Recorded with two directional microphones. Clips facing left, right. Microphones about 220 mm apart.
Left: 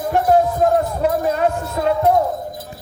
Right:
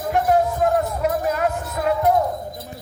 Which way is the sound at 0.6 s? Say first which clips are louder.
Left 3 dB; 30° left (ahead or behind).